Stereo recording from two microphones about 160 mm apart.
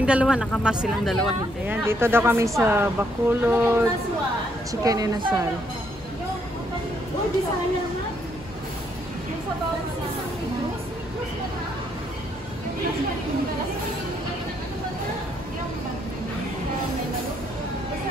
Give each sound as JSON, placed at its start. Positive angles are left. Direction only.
{"t": 0.0, "sound": "a woman's voice", "side_deg": -5}
{"t": 1.7, "sound": "speech", "side_deg": -15}
{"t": 4.8, "sound": "speech", "side_deg": -25}